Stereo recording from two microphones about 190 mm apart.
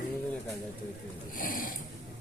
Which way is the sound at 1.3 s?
45° left (ahead or behind).